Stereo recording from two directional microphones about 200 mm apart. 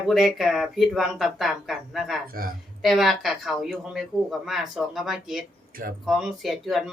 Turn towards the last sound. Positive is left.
turn(degrees=0)  # may be behind; listen again after turning